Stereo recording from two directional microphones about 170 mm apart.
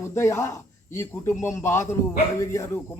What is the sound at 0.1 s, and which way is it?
A man's voice, 15° left (ahead or behind).